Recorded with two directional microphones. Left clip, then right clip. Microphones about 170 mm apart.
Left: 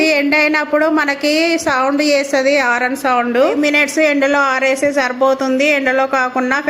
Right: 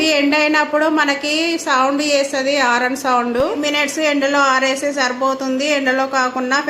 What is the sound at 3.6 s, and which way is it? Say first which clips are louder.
A woman's voice: left 4 dB; 30° left (ahead or behind).